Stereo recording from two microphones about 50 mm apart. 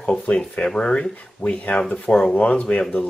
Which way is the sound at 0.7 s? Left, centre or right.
Centre.